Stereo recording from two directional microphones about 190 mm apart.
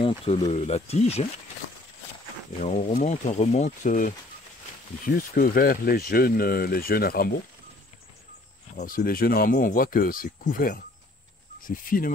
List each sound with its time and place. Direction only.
0.0 s speech: 30° left (ahead or behind)
2.6 s speech: 40° left (ahead or behind)
8.7 s speech: 45° left (ahead or behind)